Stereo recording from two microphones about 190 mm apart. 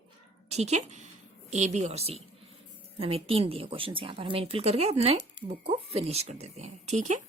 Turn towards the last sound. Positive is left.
turn(degrees=-40)  # may be behind; listen again after turning